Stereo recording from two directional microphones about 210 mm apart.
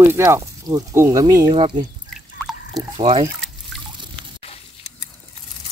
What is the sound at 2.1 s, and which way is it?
Drip, centre (ahead or behind).